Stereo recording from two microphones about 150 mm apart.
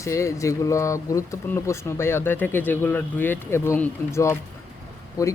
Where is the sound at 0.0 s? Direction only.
20° left (ahead or behind).